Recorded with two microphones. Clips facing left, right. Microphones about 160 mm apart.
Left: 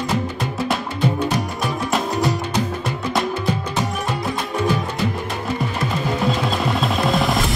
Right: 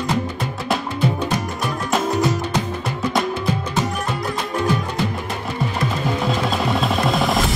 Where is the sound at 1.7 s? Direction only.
Centre (ahead or behind).